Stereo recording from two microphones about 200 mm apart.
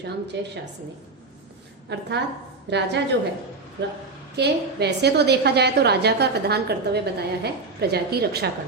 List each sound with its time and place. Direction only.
0.0 s a woman's voice: 60° right (ahead or behind)
1.9 s a woman's voice: 60° right (ahead or behind)
4.4 s a woman's voice: 55° right (ahead or behind)